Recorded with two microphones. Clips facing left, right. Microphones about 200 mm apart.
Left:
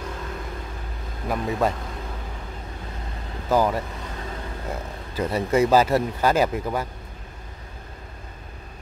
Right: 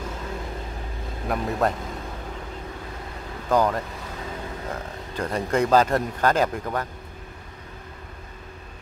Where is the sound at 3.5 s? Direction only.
10° left (ahead or behind).